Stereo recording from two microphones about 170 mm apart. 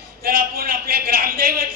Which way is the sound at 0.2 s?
65° right (ahead or behind).